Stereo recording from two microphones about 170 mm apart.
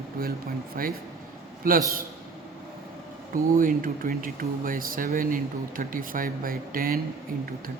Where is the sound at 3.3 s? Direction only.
55° right (ahead or behind).